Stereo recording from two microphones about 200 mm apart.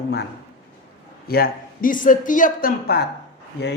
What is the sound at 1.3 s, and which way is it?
Speech, 50° left (ahead or behind).